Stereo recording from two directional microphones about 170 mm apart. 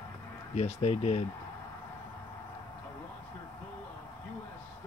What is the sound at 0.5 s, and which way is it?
Speech, 40° left (ahead or behind).